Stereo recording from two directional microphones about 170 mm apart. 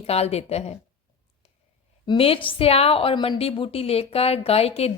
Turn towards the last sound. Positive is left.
turn(degrees=35)  # may be behind; listen again after turning